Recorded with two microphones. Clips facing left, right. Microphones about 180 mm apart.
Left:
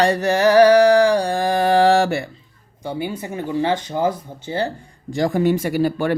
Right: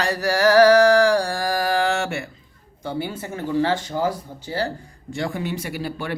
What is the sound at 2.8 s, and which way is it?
Speech, 15° left (ahead or behind).